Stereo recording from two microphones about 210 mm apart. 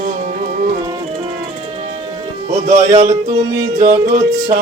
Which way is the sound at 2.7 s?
35° right (ahead or behind).